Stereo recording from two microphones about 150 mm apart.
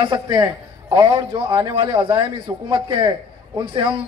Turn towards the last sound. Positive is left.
turn(degrees=-35)  # may be behind; listen again after turning